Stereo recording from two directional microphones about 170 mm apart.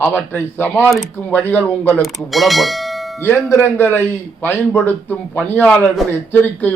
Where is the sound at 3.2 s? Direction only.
10° left (ahead or behind).